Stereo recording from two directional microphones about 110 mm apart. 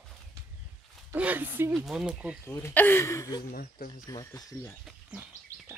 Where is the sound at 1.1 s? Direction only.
15° right (ahead or behind).